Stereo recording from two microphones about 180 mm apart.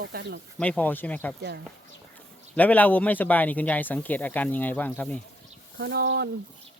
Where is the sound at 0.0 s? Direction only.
65° right (ahead or behind).